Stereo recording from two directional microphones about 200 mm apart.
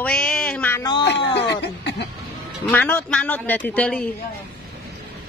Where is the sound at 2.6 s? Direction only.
10° left (ahead or behind).